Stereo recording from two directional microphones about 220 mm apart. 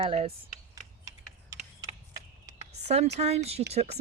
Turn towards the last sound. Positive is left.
turn(degrees=-30)  # may be behind; listen again after turning